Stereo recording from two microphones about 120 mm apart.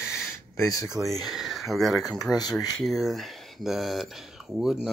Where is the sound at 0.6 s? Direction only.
30° left (ahead or behind).